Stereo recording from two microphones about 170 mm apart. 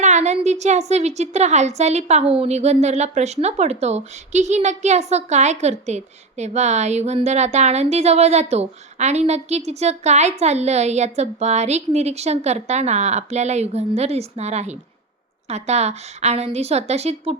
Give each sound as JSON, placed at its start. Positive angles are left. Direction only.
{"t": 0.0, "sound": "a woman's voice", "side_deg": -40}